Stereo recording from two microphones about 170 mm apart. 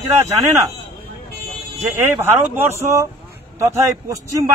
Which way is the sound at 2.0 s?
15° right (ahead or behind).